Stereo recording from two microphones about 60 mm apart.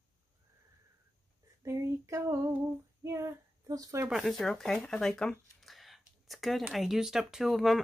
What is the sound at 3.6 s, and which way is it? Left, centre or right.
Speech, right.